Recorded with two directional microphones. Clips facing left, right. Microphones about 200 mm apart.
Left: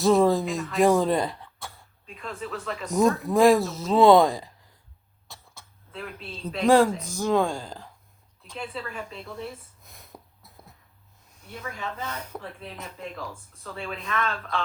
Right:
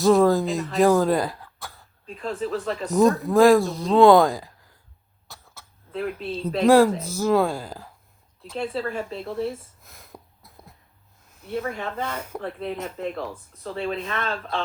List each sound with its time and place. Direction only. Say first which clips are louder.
0.0 s speech: right 2 dB; centre (ahead or behind)
2.0 s speech: right 7 dB; 35° right (ahead or behind)
2.9 s speech: right 3 dB; centre (ahead or behind)
5.3 s cough: right 1 dB; centre (ahead or behind)
6.2 s speech: right 4 dB; 45° right (ahead or behind)
6.7 s speech: right 3 dB; 5° right (ahead or behind)
8.5 s speech: right 7 dB; 35° right (ahead or behind)
9.8 s a sound: right 2 dB; centre (ahead or behind)
11.8 s speech: right 4 dB; 50° right (ahead or behind)
13.7 s speech: right 6 dB; 35° right (ahead or behind)